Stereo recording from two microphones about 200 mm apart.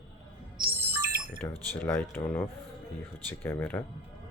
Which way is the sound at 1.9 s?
5° left (ahead or behind).